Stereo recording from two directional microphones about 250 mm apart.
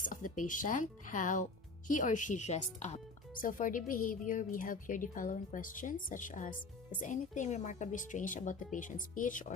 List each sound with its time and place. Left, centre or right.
0.0 s music: left
0.3 s speech: left